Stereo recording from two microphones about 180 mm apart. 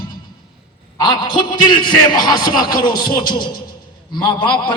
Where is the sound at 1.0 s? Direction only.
25° left (ahead or behind).